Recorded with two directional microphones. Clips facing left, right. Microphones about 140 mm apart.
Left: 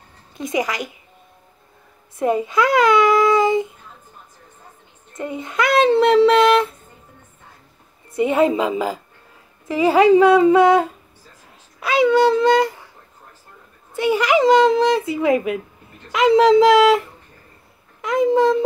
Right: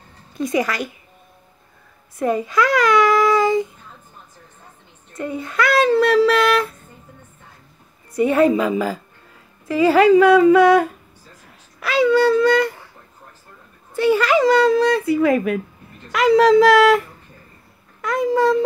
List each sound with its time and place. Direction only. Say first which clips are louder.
0.4 s a woman's voice: right 2 dB; 20° left (ahead or behind)
2.1 s speech: left 1 dB; 20° left (ahead or behind)
5.1 s a sound: right 1 dB; 20° left (ahead or behind)
8.1 s speech: right 1 dB; 20° left (ahead or behind)
11.8 s dog: left 1 dB; 20° left (ahead or behind)
13.9 s speech: right 1 dB; 20° left (ahead or behind)
18.0 s a sound: left 2 dB; 20° left (ahead or behind)